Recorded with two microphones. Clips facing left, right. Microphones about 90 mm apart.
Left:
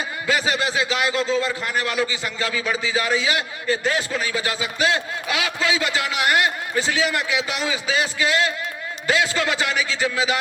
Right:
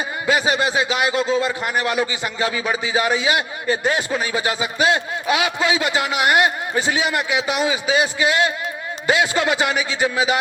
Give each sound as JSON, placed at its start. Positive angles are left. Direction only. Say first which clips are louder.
{"t": 0.3, "sound": "a man's voice", "louder": "right 3 dB", "side_deg": -25}